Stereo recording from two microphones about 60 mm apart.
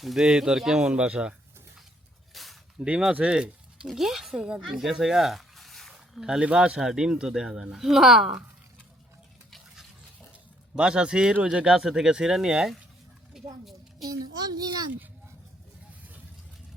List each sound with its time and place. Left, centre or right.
0.0 s speech: centre
2.3 s a sound: centre
3.1 s speech: centre
4.4 s speech: centre
5.9 s a sound: centre
6.4 s speech: centre
10.8 s speech: centre
13.3 s a sound: centre
14.0 s a child's voice: right